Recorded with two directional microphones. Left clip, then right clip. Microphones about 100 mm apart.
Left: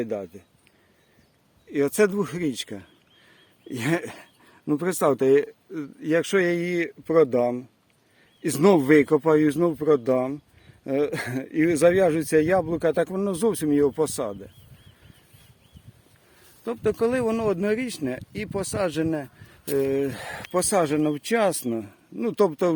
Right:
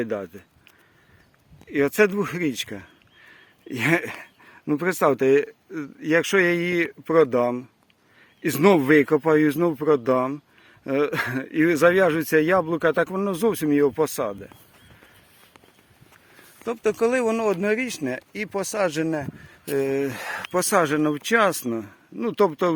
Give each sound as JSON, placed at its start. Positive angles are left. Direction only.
{"t": 0.0, "sound": "speech", "side_deg": 0}
{"t": 1.7, "sound": "speech", "side_deg": 15}
{"t": 8.4, "sound": "speech", "side_deg": 15}
{"t": 16.6, "sound": "speech", "side_deg": 25}
{"t": 21.7, "sound": "speech", "side_deg": 35}